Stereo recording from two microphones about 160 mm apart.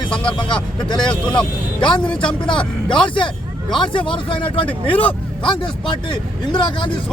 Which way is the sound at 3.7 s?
30° left (ahead or behind).